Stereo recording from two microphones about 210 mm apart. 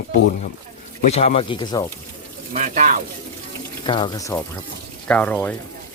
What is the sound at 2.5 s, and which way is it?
Speech, 35° right (ahead or behind).